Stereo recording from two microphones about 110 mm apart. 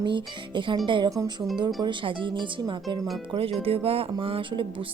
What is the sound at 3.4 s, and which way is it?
Speech, 60° right (ahead or behind).